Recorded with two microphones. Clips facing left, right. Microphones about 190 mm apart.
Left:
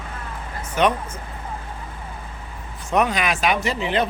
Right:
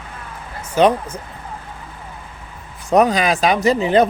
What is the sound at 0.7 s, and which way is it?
Speech, 30° right (ahead or behind).